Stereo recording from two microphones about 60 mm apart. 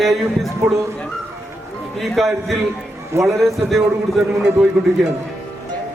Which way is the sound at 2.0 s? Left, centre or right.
Centre.